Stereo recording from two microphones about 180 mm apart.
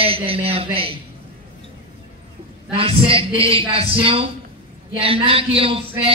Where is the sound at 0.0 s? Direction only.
30° right (ahead or behind).